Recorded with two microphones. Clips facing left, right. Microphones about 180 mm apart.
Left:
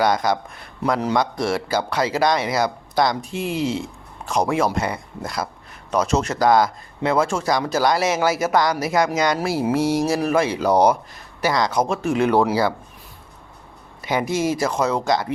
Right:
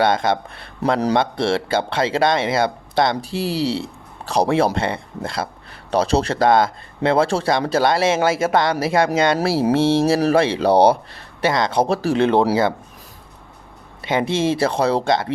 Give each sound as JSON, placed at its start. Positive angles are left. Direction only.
{"t": 0.0, "sound": "speech", "side_deg": -25}
{"t": 14.0, "sound": "speech", "side_deg": -25}